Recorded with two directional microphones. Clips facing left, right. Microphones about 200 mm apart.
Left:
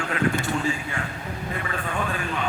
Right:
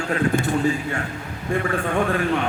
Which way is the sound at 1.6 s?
50° right (ahead or behind).